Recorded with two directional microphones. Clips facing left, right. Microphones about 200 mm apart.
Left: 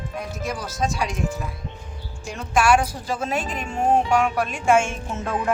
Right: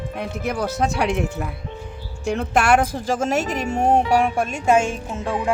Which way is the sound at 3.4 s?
70° right (ahead or behind).